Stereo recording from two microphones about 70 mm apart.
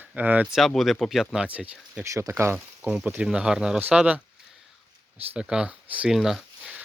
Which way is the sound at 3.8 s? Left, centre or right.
Right.